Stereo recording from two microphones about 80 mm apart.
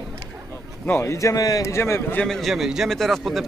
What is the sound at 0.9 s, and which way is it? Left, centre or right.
Speech, left.